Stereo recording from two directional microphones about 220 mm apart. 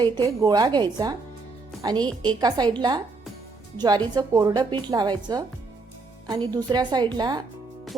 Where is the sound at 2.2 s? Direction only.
20° right (ahead or behind).